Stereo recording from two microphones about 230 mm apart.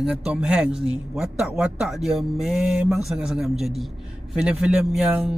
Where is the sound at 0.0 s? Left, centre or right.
Centre.